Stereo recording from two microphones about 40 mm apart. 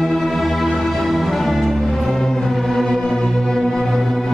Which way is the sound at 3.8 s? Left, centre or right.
Centre.